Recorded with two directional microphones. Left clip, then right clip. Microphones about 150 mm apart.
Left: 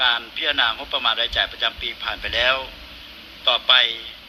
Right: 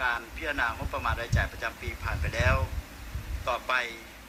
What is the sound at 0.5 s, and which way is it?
Speech, 10° left (ahead or behind).